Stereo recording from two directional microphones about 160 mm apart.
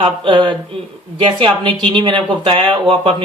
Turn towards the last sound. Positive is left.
turn(degrees=-35)  # may be behind; listen again after turning